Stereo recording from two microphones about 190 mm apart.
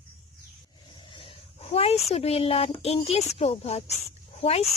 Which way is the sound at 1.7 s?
30° left (ahead or behind).